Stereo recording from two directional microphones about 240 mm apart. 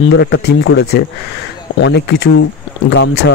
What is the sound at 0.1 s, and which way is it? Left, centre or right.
Speech, left.